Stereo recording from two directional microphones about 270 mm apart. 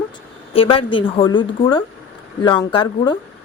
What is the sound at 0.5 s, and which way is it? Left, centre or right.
A woman's voice, centre.